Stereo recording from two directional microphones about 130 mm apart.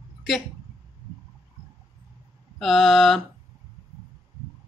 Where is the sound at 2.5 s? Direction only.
Centre (ahead or behind).